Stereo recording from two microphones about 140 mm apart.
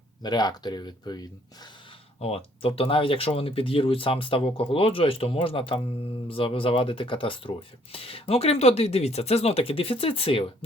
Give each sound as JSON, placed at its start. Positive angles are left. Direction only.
{"t": 0.2, "sound": "speech", "side_deg": 30}
{"t": 2.2, "sound": "speech", "side_deg": 45}